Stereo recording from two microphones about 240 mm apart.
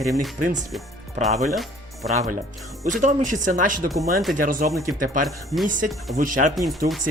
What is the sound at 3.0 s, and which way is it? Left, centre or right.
Speech, right.